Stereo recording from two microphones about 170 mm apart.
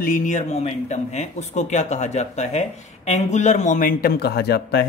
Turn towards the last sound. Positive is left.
turn(degrees=75)  # may be behind; listen again after turning